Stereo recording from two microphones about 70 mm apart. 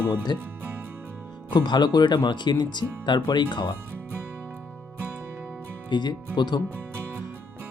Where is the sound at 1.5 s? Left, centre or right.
Left.